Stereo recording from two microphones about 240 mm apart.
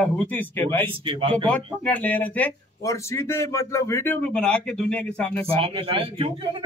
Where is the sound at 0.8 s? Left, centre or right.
Right.